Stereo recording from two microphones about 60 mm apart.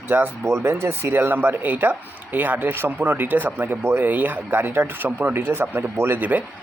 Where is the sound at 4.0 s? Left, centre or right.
Right.